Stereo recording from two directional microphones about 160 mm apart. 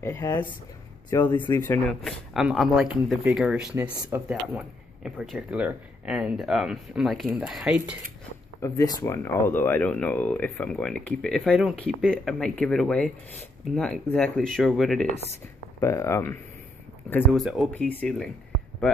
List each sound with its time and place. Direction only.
0.0 s speech: 20° left (ahead or behind)
1.9 s speech: centre (ahead or behind)
4.6 s speech: 5° right (ahead or behind)
8.5 s speech: 20° left (ahead or behind); by 15.0 s centre (ahead or behind)
15.8 s speech: 20° left (ahead or behind)
17.3 s speech: centre (ahead or behind)